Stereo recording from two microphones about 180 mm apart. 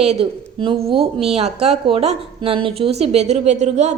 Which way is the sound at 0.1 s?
30° right (ahead or behind).